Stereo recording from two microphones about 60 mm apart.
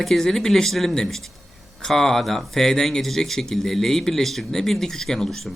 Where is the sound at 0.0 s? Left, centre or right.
Centre.